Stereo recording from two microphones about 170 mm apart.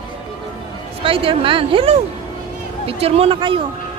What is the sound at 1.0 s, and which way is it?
Speech, 30° right (ahead or behind).